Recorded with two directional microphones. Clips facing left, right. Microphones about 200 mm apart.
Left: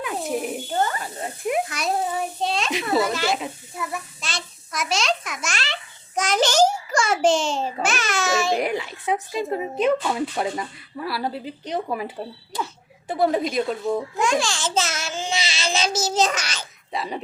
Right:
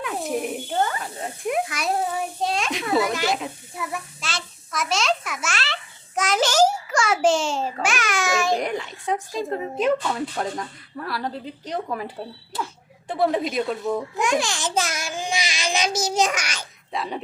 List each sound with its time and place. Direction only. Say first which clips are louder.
0.0 s a woman's voice: even; centre (ahead or behind)
1.6 s a child's voice: even; 10° right (ahead or behind)
3.0 s a child's voice: even; 15° right (ahead or behind)
3.3 s a sound: left 1 dB; 5° right (ahead or behind)
8.5 s a sound: left 2 dB; 5° left (ahead or behind)
10.0 s a woman's voice: left 2 dB; 10° left (ahead or behind)
14.2 s babbling: left 1 dB; 20° right (ahead or behind)
16.9 s a woman's voice: even; centre (ahead or behind)